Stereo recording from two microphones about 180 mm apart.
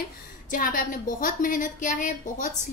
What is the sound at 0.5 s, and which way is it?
A woman's voice, 50° left (ahead or behind).